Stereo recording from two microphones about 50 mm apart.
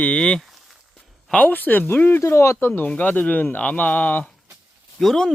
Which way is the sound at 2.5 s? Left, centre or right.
Left.